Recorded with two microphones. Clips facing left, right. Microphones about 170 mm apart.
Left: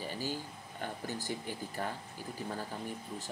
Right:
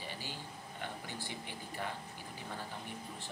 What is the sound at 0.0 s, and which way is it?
Speech, 40° left (ahead or behind).